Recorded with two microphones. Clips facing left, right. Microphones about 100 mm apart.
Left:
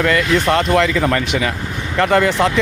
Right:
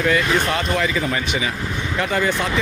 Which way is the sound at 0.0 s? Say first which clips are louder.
Left 3 dB; 70° left (ahead or behind).